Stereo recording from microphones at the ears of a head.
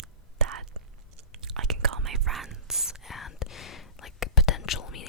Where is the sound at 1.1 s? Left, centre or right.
Right.